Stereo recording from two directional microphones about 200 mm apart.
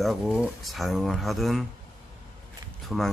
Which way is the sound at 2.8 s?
Centre (ahead or behind).